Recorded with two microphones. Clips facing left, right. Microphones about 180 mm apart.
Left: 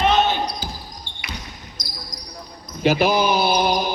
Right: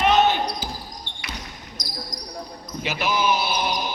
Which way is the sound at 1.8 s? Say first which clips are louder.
Right 3 dB; 40° right (ahead or behind).